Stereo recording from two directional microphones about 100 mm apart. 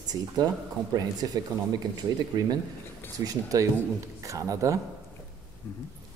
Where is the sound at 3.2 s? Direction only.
35° right (ahead or behind).